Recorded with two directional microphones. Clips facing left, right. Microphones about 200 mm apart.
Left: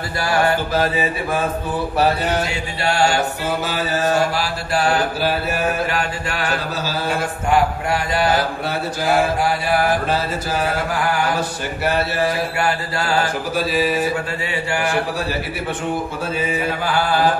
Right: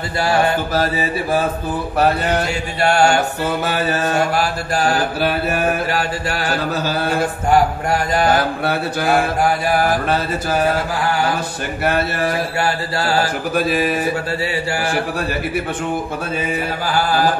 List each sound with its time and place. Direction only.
2.8 s mantra: 50° right (ahead or behind)
5.9 s mantra: 35° right (ahead or behind)
6.8 s mantra: 55° right (ahead or behind)
12.6 s mantra: 35° right (ahead or behind)
13.6 s mantra: 55° right (ahead or behind)